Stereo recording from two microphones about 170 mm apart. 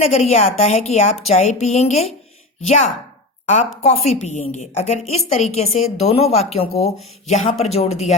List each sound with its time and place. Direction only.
0.0 s a woman's voice: 35° left (ahead or behind)